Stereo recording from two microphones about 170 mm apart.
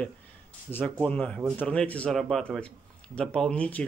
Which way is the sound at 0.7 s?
10° left (ahead or behind).